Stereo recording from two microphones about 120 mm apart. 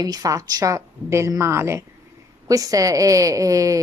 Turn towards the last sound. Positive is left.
turn(degrees=-30)  # may be behind; listen again after turning